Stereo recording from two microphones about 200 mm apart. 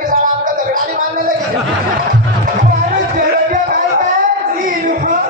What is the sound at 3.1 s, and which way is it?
Music, 45° right (ahead or behind).